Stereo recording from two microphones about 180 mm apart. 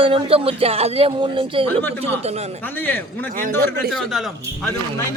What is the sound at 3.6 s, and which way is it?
Speech, 60° right (ahead or behind).